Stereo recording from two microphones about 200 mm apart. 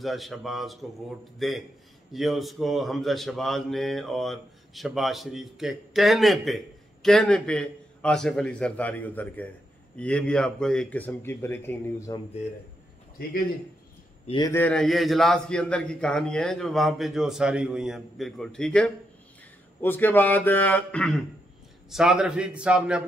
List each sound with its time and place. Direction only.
0.0 s a man's voice: centre (ahead or behind)
14.2 s a man's voice: 25° left (ahead or behind)
14.5 s a man's voice: 5° left (ahead or behind)